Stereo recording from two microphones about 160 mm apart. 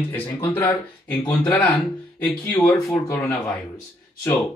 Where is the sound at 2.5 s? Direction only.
20° left (ahead or behind).